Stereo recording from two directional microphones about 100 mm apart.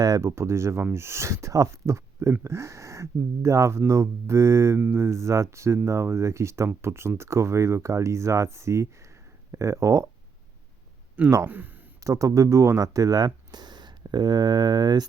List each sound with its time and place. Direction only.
0.0 s speech: 30° right (ahead or behind)
11.2 s speech: 25° right (ahead or behind)
12.0 s speech: 30° right (ahead or behind)